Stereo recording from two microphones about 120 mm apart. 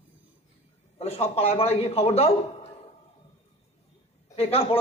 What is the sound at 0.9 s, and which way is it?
A man's voice, 60° left (ahead or behind).